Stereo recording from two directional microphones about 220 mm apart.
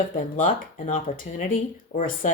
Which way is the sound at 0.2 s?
35° left (ahead or behind).